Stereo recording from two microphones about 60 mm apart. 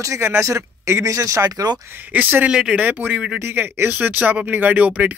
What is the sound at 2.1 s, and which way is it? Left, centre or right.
Speech, right.